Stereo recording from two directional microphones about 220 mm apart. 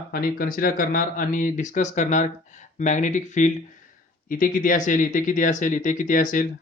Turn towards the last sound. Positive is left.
turn(degrees=35)  # may be behind; listen again after turning